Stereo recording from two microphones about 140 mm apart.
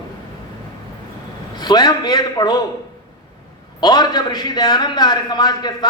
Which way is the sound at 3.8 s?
30° left (ahead or behind).